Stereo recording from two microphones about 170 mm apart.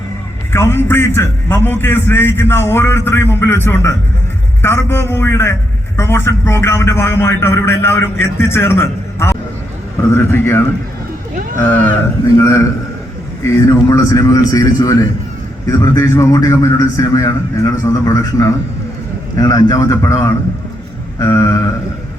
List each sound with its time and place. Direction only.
0.5 s a man's voice: 15° left (ahead or behind)
12.4 s a man's voice: 15° left (ahead or behind)